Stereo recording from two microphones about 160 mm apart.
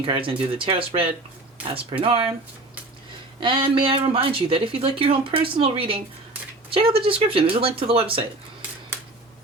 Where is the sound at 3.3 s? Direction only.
30° right (ahead or behind).